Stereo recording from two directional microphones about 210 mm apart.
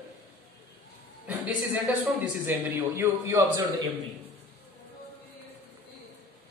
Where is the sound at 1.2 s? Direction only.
10° right (ahead or behind).